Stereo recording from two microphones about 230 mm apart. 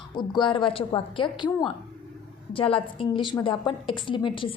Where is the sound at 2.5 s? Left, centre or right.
Left.